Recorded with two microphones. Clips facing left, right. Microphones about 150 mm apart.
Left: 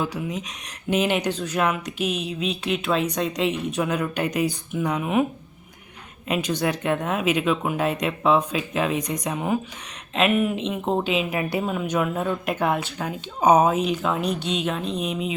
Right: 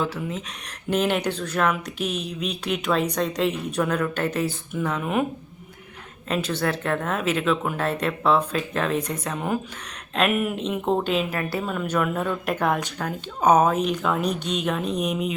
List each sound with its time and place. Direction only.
0.0 s speech: 10° left (ahead or behind)
6.2 s speech: 10° left (ahead or behind)
10.2 s speech: centre (ahead or behind)
11.3 s speech: 15° left (ahead or behind)
11.7 s speech: 5° left (ahead or behind)